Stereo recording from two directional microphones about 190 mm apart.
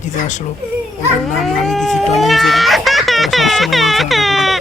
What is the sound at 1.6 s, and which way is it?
Speech, centre (ahead or behind).